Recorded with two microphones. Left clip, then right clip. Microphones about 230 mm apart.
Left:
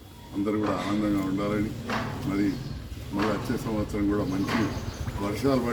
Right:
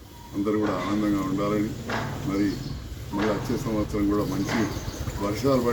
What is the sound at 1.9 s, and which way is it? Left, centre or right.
Speech, left.